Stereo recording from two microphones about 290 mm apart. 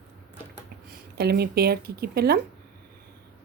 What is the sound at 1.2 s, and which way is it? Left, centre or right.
A woman's voice, right.